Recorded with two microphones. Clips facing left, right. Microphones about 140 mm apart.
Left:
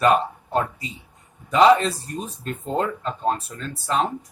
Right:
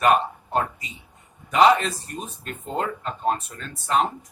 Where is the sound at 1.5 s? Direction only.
35° left (ahead or behind).